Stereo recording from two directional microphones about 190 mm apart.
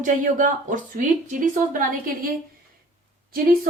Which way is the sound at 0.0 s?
45° right (ahead or behind).